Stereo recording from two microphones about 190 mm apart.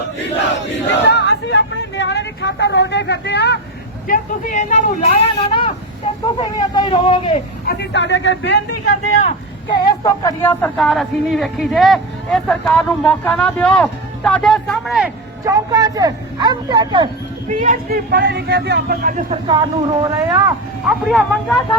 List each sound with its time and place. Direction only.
1.0 s a sound: 60° left (ahead or behind)
4.0 s speech: 45° left (ahead or behind)
7.7 s speech: 65° left (ahead or behind)
9.6 s speech: 25° left (ahead or behind); by 15.1 s centre (ahead or behind)
15.4 s speech: 20° right (ahead or behind)
17.5 s a man's voice: 45° right (ahead or behind)
19.5 s speech: 20° right (ahead or behind)
20.8 s speech: centre (ahead or behind)